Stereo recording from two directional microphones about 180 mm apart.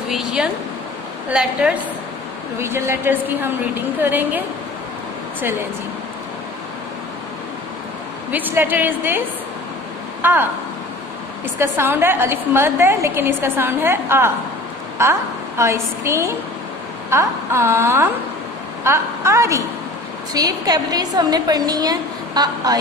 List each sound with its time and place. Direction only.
0.1 s a woman's voice: 5° right (ahead or behind)
8.3 s a woman's voice: 10° right (ahead or behind)
11.5 s a woman's voice: 15° right (ahead or behind)